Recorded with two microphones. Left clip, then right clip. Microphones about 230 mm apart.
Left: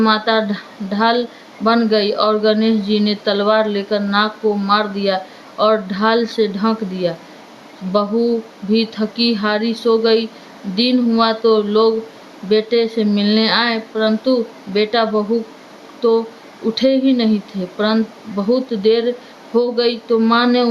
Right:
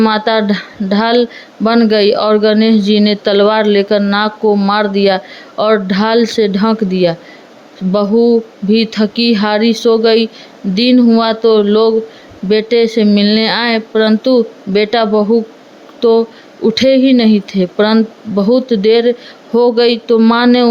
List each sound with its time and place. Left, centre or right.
0.0 s speech: right